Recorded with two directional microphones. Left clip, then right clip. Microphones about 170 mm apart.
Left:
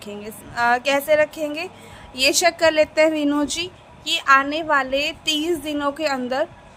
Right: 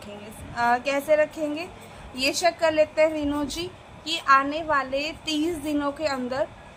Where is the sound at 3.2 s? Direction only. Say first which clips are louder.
Left 6 dB; 40° left (ahead or behind).